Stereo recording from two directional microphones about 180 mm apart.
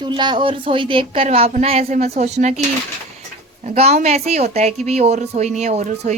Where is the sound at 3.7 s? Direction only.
35° right (ahead or behind).